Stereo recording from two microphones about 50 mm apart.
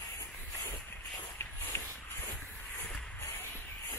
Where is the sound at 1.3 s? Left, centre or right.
Left.